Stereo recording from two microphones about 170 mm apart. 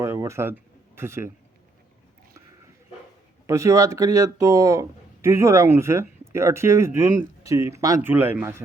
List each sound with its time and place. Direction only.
0.0 s a sound: 15° right (ahead or behind)
0.9 s speech: 15° right (ahead or behind)
3.4 s speech: 15° right (ahead or behind)